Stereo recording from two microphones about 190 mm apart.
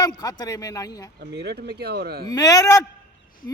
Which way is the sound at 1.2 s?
55° right (ahead or behind).